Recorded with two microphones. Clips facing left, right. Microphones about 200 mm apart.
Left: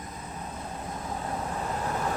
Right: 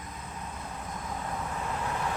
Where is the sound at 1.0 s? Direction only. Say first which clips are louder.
Left 2 dB; 35° left (ahead or behind).